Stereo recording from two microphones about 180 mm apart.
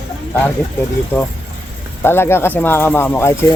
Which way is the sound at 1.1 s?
10° left (ahead or behind).